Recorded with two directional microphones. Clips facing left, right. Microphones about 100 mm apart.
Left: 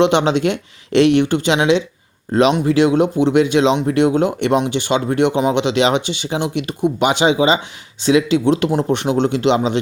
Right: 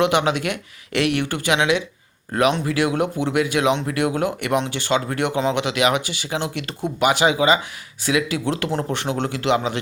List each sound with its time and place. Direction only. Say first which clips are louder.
0.0 s speech: left 5 dB; 25° left (ahead or behind)